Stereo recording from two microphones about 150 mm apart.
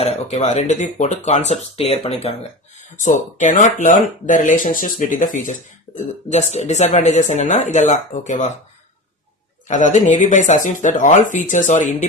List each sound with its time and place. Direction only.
0.0 s speech: 45° left (ahead or behind)
2.7 s speech: 55° left (ahead or behind)
6.2 s speech: 50° left (ahead or behind)
9.6 s speech: 55° left (ahead or behind)